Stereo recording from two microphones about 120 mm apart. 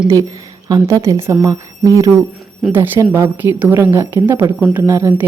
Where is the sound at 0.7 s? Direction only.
25° right (ahead or behind).